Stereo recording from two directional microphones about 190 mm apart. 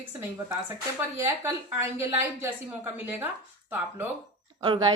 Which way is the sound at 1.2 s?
15° right (ahead or behind).